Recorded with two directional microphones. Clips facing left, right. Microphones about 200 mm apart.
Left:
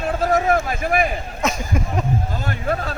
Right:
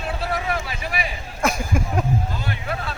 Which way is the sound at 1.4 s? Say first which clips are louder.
Right 1 dB; 10° right (ahead or behind).